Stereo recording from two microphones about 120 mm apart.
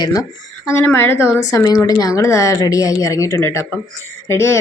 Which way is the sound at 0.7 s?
15° left (ahead or behind).